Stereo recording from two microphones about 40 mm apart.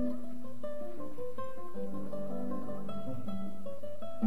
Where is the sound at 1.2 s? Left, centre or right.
Left.